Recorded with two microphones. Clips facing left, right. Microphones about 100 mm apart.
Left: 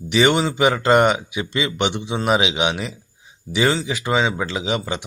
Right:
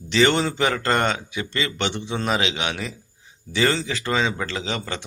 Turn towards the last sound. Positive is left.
turn(degrees=15)  # may be behind; listen again after turning